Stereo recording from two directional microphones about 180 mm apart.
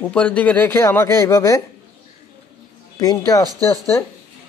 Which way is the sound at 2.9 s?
20° left (ahead or behind).